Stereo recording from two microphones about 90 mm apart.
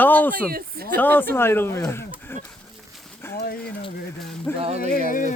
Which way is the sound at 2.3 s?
25° left (ahead or behind).